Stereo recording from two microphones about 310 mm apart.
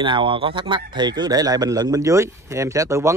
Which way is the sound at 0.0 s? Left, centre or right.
Centre.